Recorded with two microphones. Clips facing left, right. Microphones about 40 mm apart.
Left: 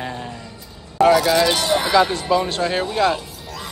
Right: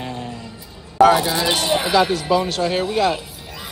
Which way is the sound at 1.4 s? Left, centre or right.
Centre.